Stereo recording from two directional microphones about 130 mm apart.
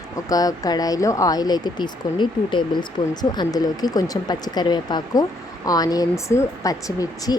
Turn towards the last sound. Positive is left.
turn(degrees=25)  # may be behind; listen again after turning